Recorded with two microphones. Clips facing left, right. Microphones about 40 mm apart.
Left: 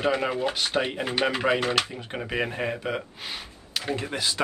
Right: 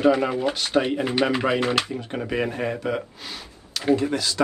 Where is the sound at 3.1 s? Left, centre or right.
Left.